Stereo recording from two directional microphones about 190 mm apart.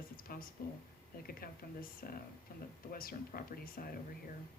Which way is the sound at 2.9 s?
50° left (ahead or behind).